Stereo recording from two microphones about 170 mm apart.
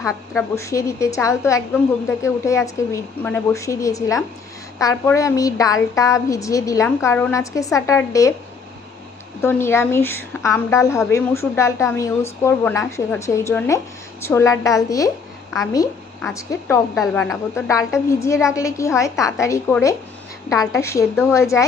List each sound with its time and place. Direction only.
0.0 s a woman's voice: 15° left (ahead or behind)
9.4 s a woman's voice: 15° left (ahead or behind)
16.3 s a woman's voice: 20° left (ahead or behind)
16.9 s a woman's voice: centre (ahead or behind)
17.5 s a woman's voice: 20° left (ahead or behind)